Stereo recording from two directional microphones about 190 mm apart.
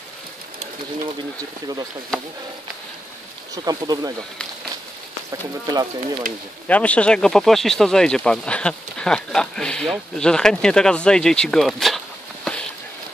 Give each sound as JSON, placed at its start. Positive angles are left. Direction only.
{"t": 3.5, "sound": "speech", "side_deg": -20}
{"t": 5.7, "sound": "speech", "side_deg": -20}
{"t": 6.7, "sound": "speech", "side_deg": 5}
{"t": 12.5, "sound": "a sound", "side_deg": 0}